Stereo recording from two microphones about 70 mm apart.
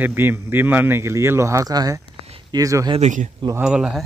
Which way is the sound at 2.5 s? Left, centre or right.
Right.